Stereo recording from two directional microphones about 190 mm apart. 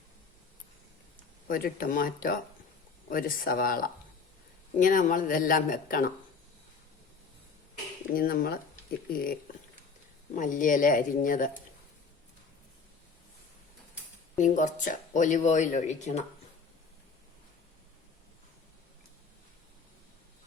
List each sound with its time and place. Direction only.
1.5 s speech: 50° left (ahead or behind)
8.1 s speech: 50° left (ahead or behind)
14.3 s speech: 40° left (ahead or behind)